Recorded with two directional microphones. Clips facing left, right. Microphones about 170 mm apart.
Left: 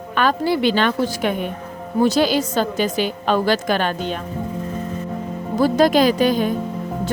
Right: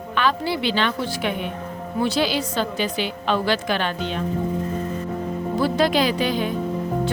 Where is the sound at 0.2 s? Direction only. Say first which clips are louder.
Left 4 dB; 45° left (ahead or behind).